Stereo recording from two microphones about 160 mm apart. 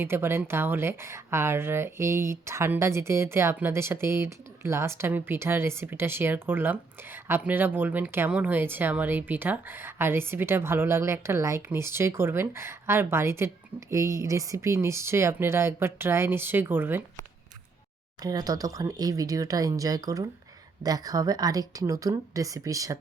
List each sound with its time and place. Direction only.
0.0 s speech: 15° right (ahead or behind)
18.2 s speech: 25° right (ahead or behind)